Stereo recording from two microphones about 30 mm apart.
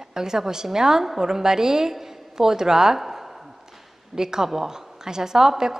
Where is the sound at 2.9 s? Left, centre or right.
Centre.